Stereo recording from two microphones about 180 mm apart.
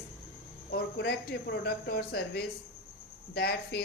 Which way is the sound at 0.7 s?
65° left (ahead or behind).